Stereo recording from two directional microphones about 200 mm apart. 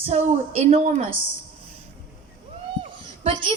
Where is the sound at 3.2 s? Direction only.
25° right (ahead or behind).